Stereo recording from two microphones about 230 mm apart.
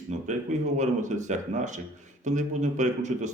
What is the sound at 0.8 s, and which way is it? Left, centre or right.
A man's voice, right.